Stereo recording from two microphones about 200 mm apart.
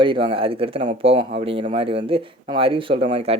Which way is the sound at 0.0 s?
25° right (ahead or behind).